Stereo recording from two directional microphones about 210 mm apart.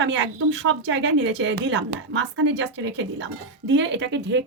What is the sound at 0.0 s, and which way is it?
Speech, 60° right (ahead or behind).